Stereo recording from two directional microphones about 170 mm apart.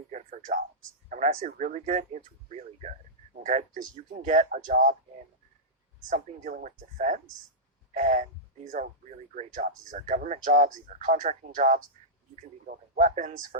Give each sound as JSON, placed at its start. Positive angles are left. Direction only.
{"t": 0.1, "sound": "a sound", "side_deg": -50}
{"t": 1.1, "sound": "speech", "side_deg": -50}
{"t": 6.1, "sound": "speech", "side_deg": -50}